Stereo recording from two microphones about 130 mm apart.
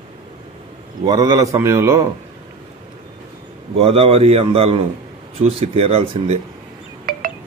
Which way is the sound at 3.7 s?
50° right (ahead or behind).